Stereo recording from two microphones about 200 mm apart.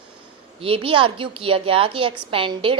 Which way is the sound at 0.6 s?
25° right (ahead or behind).